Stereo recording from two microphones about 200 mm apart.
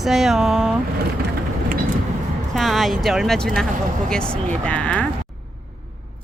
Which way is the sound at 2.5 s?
Centre (ahead or behind).